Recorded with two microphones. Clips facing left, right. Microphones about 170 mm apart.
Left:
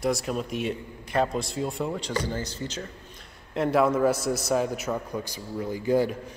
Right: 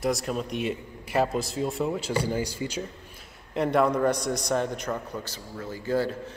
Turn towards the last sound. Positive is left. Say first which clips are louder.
# left 3 dB
turn(degrees=15)  # may be behind; listen again after turning